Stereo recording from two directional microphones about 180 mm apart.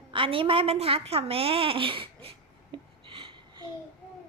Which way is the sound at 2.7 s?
30° right (ahead or behind).